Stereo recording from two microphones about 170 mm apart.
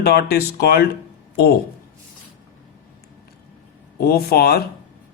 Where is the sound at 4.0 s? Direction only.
65° left (ahead or behind).